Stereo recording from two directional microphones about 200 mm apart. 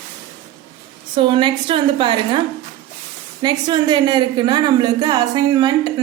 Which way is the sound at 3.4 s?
20° right (ahead or behind).